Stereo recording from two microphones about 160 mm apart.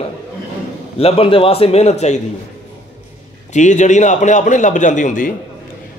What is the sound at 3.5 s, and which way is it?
A man's voice, 50° left (ahead or behind).